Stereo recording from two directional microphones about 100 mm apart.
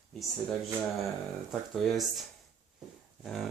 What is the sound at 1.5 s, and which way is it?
Speech, centre (ahead or behind).